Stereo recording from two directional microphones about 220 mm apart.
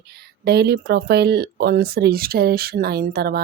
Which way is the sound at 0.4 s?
50° right (ahead or behind).